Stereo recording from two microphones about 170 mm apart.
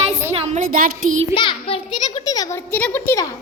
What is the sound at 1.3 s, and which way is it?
A child's voice, 30° left (ahead or behind).